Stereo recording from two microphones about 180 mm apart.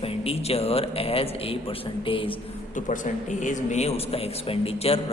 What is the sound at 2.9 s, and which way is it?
Speech, 45° left (ahead or behind).